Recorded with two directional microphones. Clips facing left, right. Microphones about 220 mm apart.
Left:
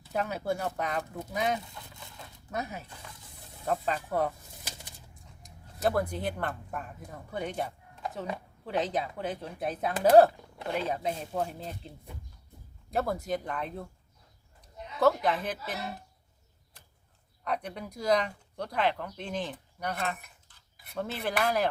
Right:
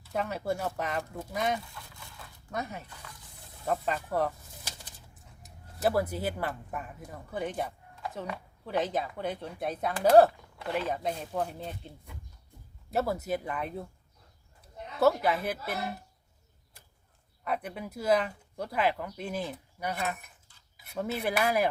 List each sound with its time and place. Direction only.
0.1 s speech: centre (ahead or behind)
12.9 s speech: 5° right (ahead or behind)
14.9 s speech: 5° right (ahead or behind)
17.4 s speech: 5° right (ahead or behind)